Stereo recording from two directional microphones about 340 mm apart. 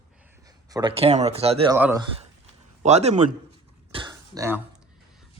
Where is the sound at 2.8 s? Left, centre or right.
Centre.